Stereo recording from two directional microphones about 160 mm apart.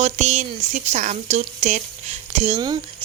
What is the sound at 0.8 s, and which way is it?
Speech, 45° right (ahead or behind).